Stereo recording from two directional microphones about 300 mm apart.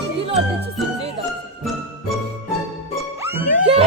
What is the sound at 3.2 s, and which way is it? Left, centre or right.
Music, centre.